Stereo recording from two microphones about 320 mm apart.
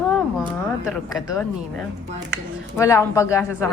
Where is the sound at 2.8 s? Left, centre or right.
Centre.